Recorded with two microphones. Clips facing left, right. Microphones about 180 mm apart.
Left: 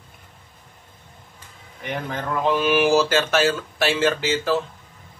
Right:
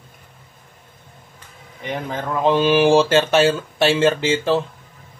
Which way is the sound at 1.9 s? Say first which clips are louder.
Right 2 dB; 20° right (ahead or behind).